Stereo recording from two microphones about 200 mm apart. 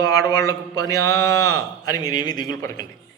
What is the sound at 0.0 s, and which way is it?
A man's voice, 15° left (ahead or behind).